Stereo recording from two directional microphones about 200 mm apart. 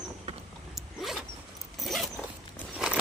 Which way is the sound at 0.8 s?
Centre (ahead or behind).